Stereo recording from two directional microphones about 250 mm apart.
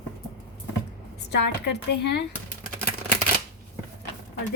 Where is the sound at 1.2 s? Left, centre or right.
Left.